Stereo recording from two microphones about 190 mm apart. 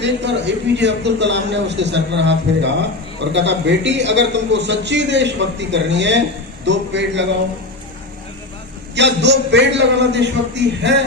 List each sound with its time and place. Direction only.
0.0 s a man's voice: 65° right (ahead or behind)
9.0 s a man's voice: 65° right (ahead or behind)